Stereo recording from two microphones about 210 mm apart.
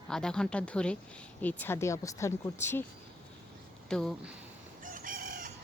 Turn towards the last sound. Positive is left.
turn(degrees=-40)  # may be behind; listen again after turning